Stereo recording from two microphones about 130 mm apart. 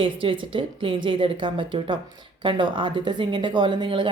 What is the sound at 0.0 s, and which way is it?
A woman's voice, 40° right (ahead or behind).